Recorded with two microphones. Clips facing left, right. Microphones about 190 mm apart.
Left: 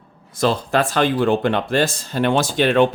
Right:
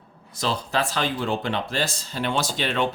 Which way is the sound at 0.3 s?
55° left (ahead or behind).